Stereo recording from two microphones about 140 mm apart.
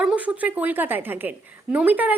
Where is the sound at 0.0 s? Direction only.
10° right (ahead or behind).